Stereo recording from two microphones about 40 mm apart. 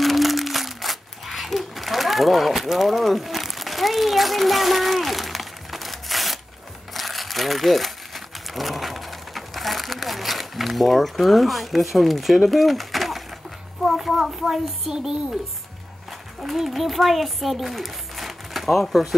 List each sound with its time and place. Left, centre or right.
0.0 s crumpling: centre
8.5 s a sound: centre
14.4 s a child's voice: centre
16.4 s speech: centre